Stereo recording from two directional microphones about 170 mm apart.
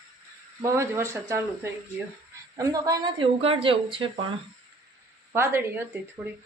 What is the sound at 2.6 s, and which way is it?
Speech, 20° right (ahead or behind).